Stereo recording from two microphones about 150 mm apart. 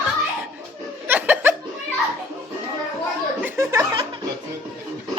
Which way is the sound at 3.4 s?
20° right (ahead or behind).